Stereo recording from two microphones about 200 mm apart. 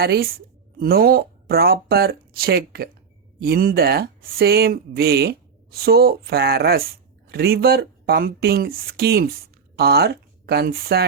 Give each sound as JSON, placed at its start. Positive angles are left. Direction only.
{"t": 0.0, "sound": "speech", "side_deg": -50}